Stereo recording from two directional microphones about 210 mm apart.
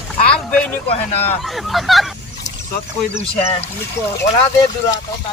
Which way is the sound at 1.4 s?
Centre (ahead or behind).